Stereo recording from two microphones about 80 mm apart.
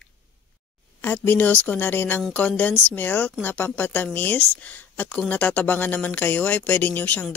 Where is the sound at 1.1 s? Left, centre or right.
Left.